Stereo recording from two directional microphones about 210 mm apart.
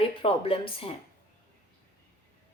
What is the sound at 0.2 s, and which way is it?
Speech, 25° left (ahead or behind).